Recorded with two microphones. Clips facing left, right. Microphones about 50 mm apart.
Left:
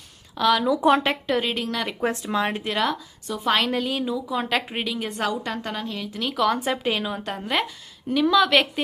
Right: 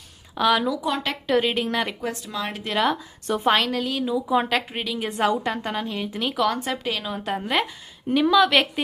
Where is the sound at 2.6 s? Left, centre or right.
Centre.